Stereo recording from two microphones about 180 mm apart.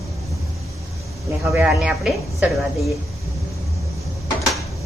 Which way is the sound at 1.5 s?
5° right (ahead or behind).